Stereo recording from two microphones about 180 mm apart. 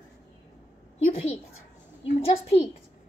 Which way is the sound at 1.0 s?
40° left (ahead or behind).